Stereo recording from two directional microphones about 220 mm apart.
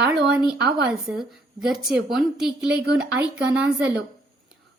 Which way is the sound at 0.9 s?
Centre (ahead or behind).